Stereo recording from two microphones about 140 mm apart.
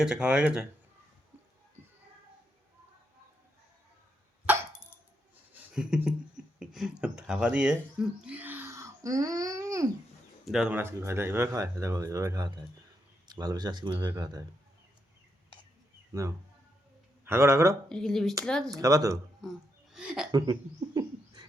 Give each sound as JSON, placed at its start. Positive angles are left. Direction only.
{"t": 0.0, "sound": "speech", "side_deg": -5}
{"t": 4.5, "sound": "dog", "side_deg": -15}
{"t": 5.7, "sound": "a sound", "side_deg": -5}
{"t": 6.6, "sound": "speech", "side_deg": -5}
{"t": 10.4, "sound": "speech", "side_deg": -5}
{"t": 17.2, "sound": "speech", "side_deg": -20}
{"t": 17.8, "sound": "speech", "side_deg": 5}
{"t": 18.7, "sound": "speech", "side_deg": -25}
{"t": 19.9, "sound": "speech", "side_deg": -5}
{"t": 20.3, "sound": "speech", "side_deg": -30}